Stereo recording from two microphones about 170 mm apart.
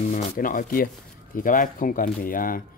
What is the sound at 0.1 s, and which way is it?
Speech, 55° left (ahead or behind).